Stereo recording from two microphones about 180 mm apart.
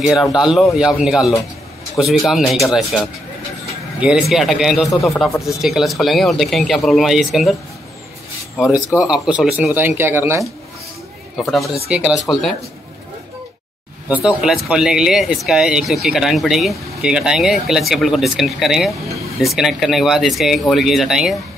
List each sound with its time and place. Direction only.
0.1 s speech: centre (ahead or behind)
5.3 s speech: 15° left (ahead or behind)
5.6 s speech: centre (ahead or behind)
8.6 s speech: 5° right (ahead or behind)
11.3 s speech: centre (ahead or behind)
14.0 s speech: 5° right (ahead or behind)